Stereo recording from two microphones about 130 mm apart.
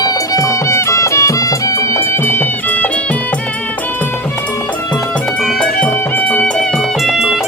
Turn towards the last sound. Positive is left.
turn(degrees=-5)  # may be behind; listen again after turning